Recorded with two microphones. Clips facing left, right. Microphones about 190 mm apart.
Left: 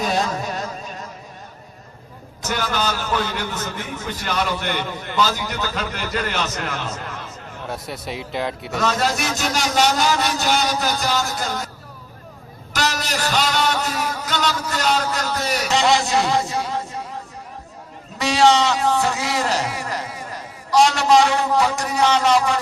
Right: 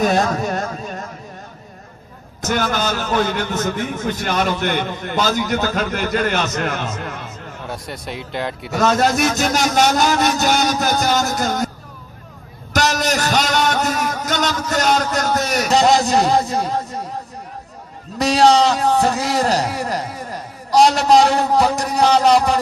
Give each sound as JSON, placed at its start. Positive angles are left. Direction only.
{"t": 0.0, "sound": "carnatic music", "side_deg": -50}
{"t": 2.4, "sound": "a man's voice", "side_deg": -50}
{"t": 7.7, "sound": "speech", "side_deg": 0}
{"t": 8.8, "sound": "a man's voice", "side_deg": -50}
{"t": 12.7, "sound": "a sound", "side_deg": -45}
{"t": 16.6, "sound": "chatter", "side_deg": -40}
{"t": 18.2, "sound": "a man's voice", "side_deg": -40}